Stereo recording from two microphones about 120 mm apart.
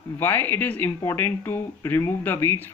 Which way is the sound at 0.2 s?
15° left (ahead or behind).